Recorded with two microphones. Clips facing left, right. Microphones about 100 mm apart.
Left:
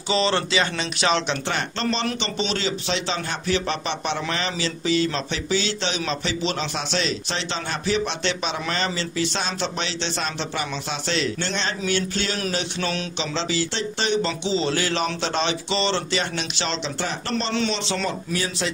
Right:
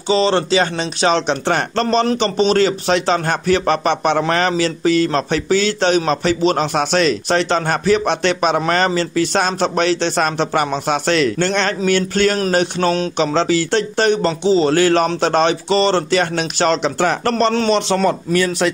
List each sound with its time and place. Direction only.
0.1 s speech: 35° right (ahead or behind)
13.2 s speech: 50° right (ahead or behind)